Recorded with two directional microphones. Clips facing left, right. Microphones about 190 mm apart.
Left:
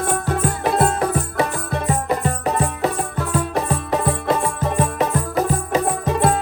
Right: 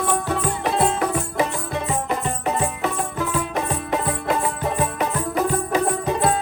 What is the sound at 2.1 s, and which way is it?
Music, 35° left (ahead or behind).